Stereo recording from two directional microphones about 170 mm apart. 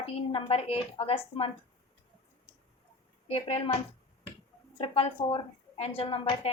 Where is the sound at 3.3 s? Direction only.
35° left (ahead or behind).